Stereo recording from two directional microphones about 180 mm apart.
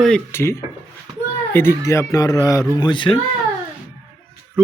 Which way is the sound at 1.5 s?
15° left (ahead or behind).